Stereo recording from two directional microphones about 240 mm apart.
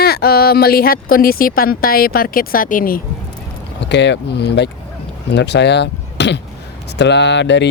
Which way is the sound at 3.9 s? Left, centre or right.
Left.